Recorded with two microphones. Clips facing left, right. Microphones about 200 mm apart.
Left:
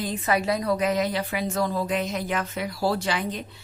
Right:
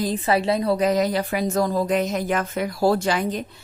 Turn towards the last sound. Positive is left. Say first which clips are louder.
# right 5 dB
turn(degrees=-45)  # may be behind; listen again after turning